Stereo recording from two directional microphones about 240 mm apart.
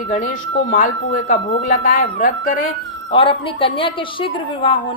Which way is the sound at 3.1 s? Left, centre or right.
Left.